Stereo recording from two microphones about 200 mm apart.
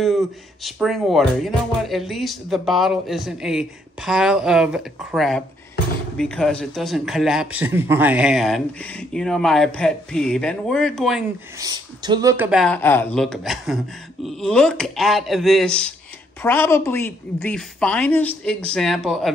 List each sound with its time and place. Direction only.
0.7 s speech: centre (ahead or behind)
11.6 s speech: 20° right (ahead or behind)
12.4 s speech: centre (ahead or behind)